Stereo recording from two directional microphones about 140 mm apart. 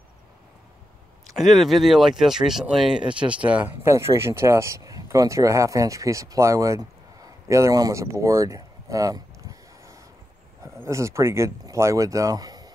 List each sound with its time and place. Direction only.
1.3 s speech: centre (ahead or behind); by 6.9 s 20° right (ahead or behind)
7.4 s a sound: 20° right (ahead or behind)
10.6 s speech: 20° right (ahead or behind)